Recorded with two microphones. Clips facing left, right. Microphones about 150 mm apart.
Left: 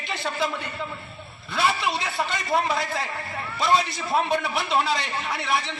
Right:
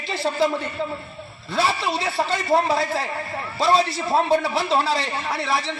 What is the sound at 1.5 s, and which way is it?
A man's voice, 30° right (ahead or behind).